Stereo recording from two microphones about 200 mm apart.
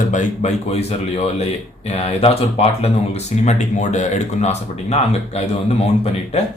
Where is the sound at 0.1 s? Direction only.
35° left (ahead or behind).